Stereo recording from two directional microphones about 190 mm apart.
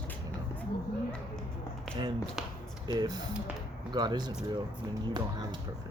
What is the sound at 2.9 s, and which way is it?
Speech, 20° right (ahead or behind).